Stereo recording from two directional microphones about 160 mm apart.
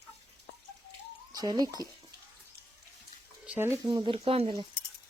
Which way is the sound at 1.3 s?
25° right (ahead or behind).